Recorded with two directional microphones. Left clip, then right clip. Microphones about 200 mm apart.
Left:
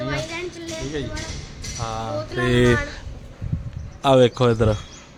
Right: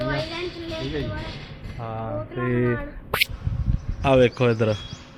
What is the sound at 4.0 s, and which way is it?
Speech, 25° left (ahead or behind).